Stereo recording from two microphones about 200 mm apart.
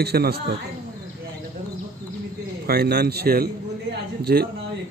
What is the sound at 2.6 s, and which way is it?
A man's voice, 50° right (ahead or behind).